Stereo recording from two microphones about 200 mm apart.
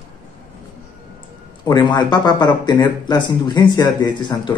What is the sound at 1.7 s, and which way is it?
Speech, 20° left (ahead or behind).